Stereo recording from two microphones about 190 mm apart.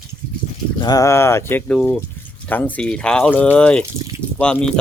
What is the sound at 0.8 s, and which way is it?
Speech, 20° left (ahead or behind).